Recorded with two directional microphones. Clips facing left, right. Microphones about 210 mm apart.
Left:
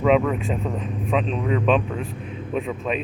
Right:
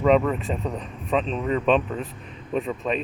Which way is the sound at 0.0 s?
Centre (ahead or behind).